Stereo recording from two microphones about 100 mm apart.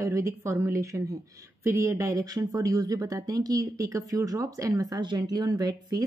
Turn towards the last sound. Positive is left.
turn(degrees=-40)  # may be behind; listen again after turning